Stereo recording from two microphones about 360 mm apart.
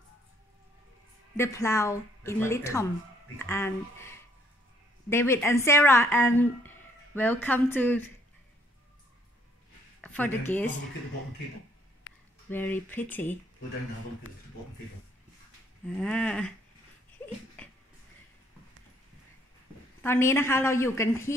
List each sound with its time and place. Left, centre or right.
1.3 s speech: centre
10.0 s speech: centre
12.1 s a sound: left
12.4 s speech: centre
16.0 s speech: centre
17.2 s dog: centre
17.6 s a sound: centre
20.0 s speech: centre